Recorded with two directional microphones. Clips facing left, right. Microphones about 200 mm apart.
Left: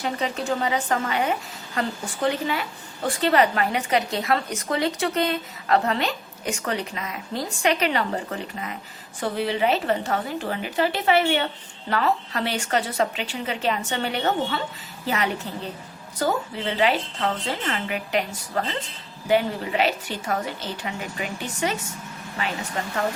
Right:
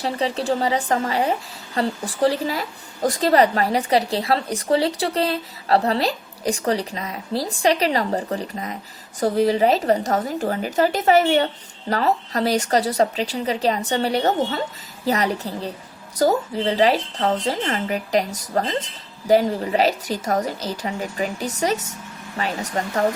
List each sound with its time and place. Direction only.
0.0 s speech: 35° right (ahead or behind)